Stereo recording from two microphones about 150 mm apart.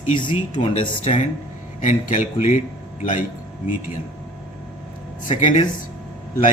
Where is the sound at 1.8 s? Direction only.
60° left (ahead or behind).